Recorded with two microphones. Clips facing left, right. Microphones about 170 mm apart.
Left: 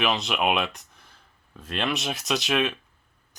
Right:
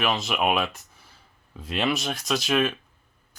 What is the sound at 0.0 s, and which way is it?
Speech, centre (ahead or behind).